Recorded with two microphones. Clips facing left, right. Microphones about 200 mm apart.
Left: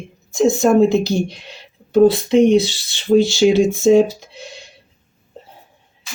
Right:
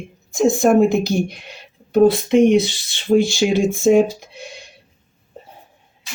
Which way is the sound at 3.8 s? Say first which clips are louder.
Left 1 dB; 30° left (ahead or behind).